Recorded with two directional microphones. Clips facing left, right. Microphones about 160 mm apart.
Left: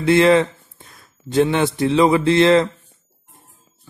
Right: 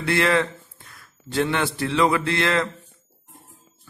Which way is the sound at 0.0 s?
20° left (ahead or behind).